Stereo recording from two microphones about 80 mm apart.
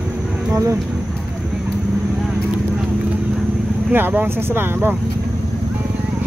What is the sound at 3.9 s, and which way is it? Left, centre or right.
Speech, right.